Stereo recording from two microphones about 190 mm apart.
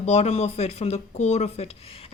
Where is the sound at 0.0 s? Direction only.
35° left (ahead or behind).